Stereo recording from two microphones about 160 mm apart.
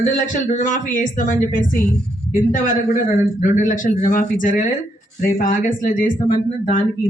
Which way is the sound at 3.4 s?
50° left (ahead or behind).